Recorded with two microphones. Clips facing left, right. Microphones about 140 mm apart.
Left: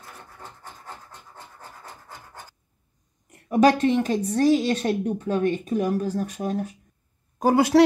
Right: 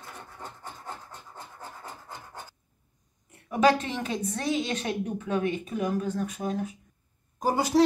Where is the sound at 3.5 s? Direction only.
40° left (ahead or behind).